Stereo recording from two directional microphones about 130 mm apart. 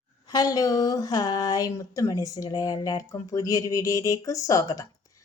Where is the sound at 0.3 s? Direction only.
30° left (ahead or behind).